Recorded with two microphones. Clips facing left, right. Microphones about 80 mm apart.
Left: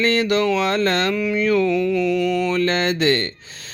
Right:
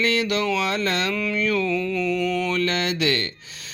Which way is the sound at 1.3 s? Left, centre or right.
Left.